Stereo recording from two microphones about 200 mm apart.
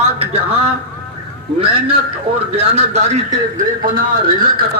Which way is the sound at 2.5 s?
35° right (ahead or behind).